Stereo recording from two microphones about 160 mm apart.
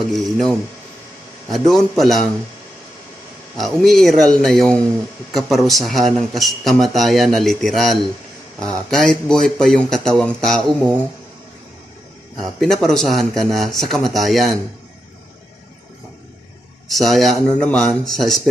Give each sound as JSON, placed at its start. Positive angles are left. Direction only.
{"t": 0.1, "sound": "a man's voice", "side_deg": 0}
{"t": 3.6, "sound": "a man's voice", "side_deg": 0}
{"t": 12.4, "sound": "a man's voice", "side_deg": 0}
{"t": 16.9, "sound": "a man's voice", "side_deg": 0}